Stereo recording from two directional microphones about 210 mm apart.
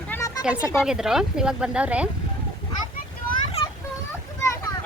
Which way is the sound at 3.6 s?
30° left (ahead or behind).